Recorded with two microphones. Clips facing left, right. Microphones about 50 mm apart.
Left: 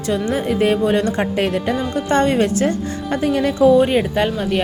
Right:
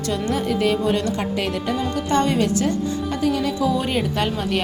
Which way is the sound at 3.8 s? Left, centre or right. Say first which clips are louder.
Left 7 dB; centre.